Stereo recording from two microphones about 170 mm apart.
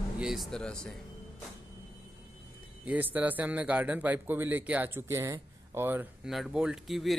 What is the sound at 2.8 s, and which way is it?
A man's voice, 10° right (ahead or behind).